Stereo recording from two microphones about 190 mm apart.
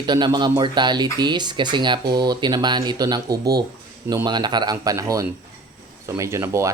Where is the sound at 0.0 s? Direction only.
25° right (ahead or behind).